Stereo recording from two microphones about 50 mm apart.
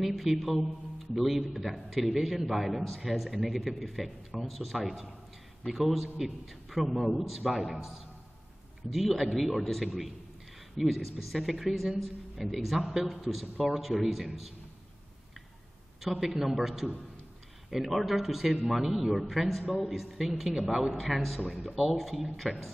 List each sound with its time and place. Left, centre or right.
0.0 s a man's voice: centre
8.9 s a man's voice: centre
16.0 s a man's voice: centre
21.4 s speech: centre
21.6 s a man's voice: centre